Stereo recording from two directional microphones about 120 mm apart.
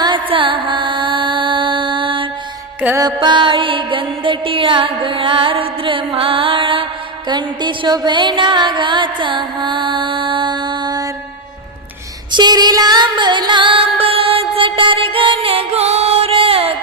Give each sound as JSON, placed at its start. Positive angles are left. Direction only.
{"t": 0.0, "sound": "music", "side_deg": -45}
{"t": 12.3, "sound": "music", "side_deg": -35}